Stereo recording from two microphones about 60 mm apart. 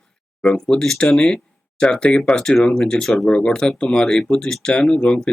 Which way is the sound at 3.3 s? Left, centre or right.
Centre.